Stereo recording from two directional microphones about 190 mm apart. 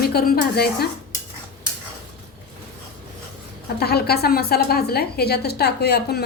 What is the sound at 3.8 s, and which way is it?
Speech, 55° left (ahead or behind).